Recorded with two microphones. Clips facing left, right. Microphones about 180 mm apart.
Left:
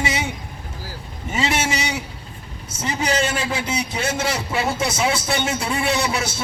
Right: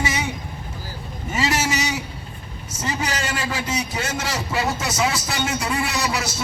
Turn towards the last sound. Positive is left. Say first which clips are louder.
# left 3 dB
turn(degrees=30)  # may be behind; listen again after turning